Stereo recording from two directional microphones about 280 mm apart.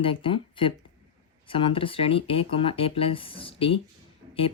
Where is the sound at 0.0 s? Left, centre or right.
Centre.